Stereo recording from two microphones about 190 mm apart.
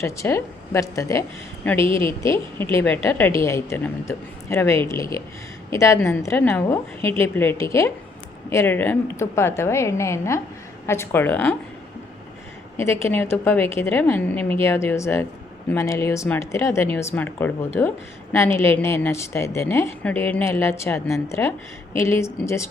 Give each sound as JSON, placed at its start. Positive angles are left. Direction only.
{"t": 0.0, "sound": "speech", "side_deg": 15}
{"t": 2.2, "sound": "speech", "side_deg": 15}
{"t": 12.7, "sound": "speech", "side_deg": 15}